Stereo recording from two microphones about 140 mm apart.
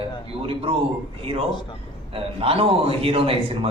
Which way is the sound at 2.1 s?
45° right (ahead or behind).